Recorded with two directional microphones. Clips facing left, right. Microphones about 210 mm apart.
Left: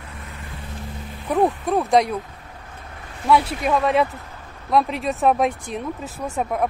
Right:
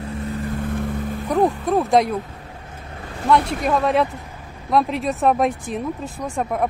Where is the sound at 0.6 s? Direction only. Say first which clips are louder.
Right 11 dB; 55° right (ahead or behind).